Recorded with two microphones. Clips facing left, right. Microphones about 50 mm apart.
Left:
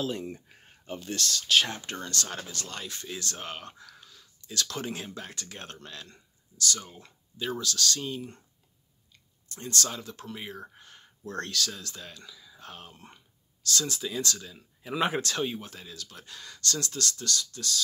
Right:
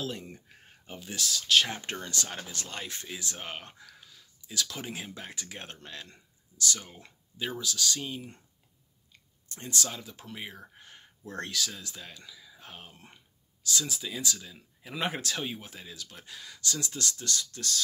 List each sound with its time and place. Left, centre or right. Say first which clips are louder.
0.0 s speech: left 5 dB; centre
1.9 s speech: left 1 dB; right
3.1 s speech: left 2 dB; centre
9.5 s speech: left 2 dB; right
9.8 s speech: left 3 dB; centre; by 17.8 s right